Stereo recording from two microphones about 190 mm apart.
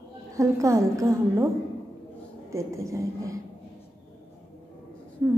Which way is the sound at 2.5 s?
15° right (ahead or behind).